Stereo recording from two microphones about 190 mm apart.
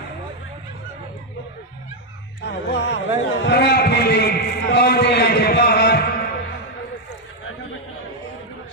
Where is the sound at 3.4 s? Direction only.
60° left (ahead or behind).